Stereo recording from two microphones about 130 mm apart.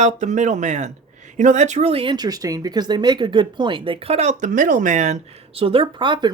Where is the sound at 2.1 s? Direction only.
30° right (ahead or behind).